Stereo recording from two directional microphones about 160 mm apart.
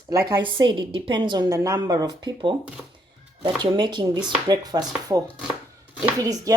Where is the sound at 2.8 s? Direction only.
5° right (ahead or behind).